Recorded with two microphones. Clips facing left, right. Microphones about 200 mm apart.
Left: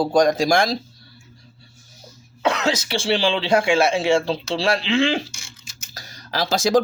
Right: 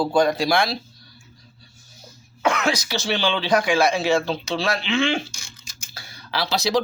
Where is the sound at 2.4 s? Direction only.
25° left (ahead or behind).